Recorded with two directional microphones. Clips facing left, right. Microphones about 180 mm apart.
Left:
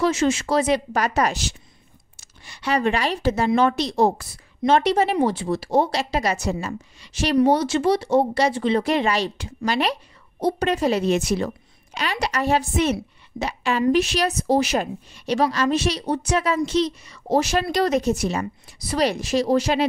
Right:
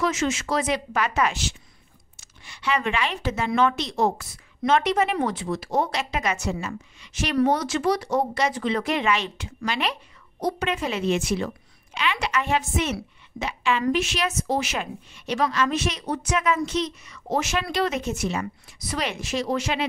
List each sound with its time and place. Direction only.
0.0 s a woman's voice: 30° left (ahead or behind)